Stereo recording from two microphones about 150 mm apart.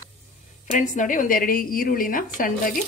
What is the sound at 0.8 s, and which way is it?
A woman's voice, 55° left (ahead or behind).